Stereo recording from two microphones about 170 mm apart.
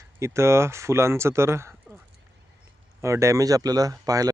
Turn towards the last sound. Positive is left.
turn(degrees=-20)  # may be behind; listen again after turning